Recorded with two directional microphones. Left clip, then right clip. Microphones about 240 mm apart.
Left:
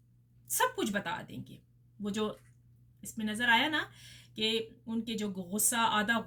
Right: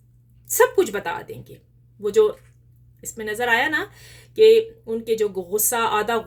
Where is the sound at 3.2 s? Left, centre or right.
Right.